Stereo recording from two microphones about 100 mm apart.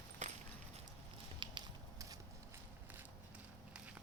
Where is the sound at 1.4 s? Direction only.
50° right (ahead or behind).